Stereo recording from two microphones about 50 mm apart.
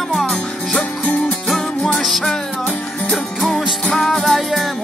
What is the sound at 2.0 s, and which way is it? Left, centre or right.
Music, centre.